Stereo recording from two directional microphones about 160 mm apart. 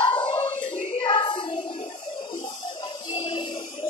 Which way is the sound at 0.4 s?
50° left (ahead or behind).